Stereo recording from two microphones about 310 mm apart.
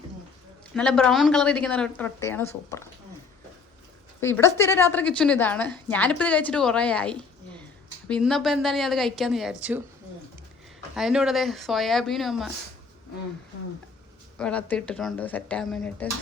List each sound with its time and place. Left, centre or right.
0.7 s a woman's voice: centre
4.2 s a woman's voice: centre
10.9 s a woman's voice: centre
14.3 s a woman's voice: centre